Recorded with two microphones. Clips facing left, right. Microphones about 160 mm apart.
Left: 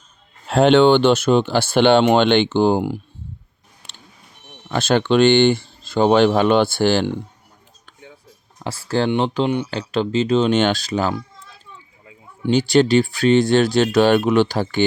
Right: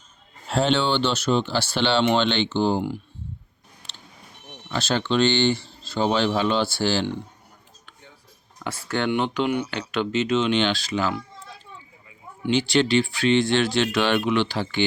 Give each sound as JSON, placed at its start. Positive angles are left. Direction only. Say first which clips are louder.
{"t": 0.4, "sound": "speech", "louder": "left 9 dB", "side_deg": 60}
{"t": 4.7, "sound": "speech", "louder": "left 7 dB", "side_deg": 55}
{"t": 8.5, "sound": "speech", "louder": "left 6 dB", "side_deg": 30}
{"t": 12.5, "sound": "speech", "louder": "left 5 dB", "side_deg": 40}